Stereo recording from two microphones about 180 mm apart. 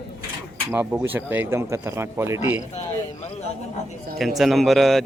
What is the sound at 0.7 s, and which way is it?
Speech, 10° right (ahead or behind).